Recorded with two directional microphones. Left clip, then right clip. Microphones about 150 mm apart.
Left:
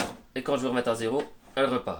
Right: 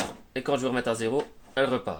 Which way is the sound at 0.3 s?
45° right (ahead or behind).